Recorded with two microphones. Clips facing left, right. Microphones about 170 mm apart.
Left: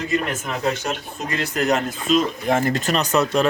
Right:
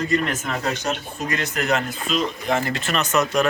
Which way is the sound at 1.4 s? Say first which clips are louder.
Left 4 dB; 35° left (ahead or behind).